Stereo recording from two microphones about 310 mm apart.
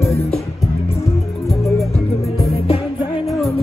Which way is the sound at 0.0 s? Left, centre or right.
Centre.